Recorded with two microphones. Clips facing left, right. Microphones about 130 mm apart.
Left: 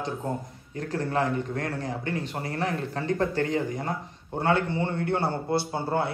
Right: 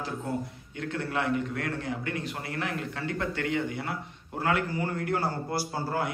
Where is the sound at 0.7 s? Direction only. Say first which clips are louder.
Left 4 dB; 35° left (ahead or behind).